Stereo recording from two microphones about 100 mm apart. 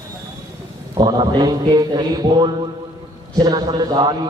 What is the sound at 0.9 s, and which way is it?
A man's voice, 50° right (ahead or behind).